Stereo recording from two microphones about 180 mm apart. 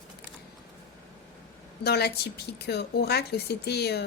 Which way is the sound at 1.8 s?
65° left (ahead or behind).